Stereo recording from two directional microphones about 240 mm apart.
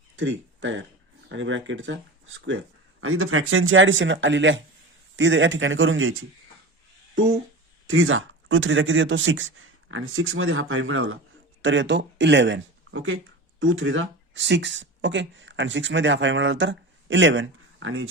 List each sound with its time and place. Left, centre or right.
0.2 s speech: right
3.0 s speech: right
7.9 s speech: right